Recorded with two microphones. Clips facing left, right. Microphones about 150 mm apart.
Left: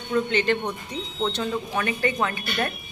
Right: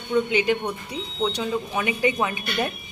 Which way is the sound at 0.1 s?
10° right (ahead or behind).